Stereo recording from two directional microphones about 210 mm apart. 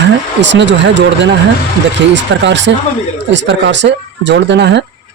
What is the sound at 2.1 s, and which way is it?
Speech, 60° right (ahead or behind).